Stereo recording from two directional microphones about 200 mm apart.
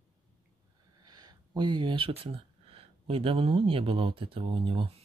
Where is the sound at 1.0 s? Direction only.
20° right (ahead or behind).